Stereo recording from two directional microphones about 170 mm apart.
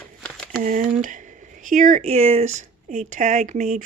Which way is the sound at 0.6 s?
50° right (ahead or behind).